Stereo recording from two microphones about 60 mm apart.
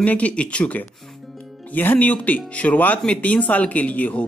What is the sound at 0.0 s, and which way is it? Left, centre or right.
Speech, left.